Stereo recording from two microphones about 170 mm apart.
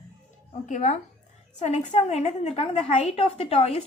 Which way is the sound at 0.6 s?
45° left (ahead or behind).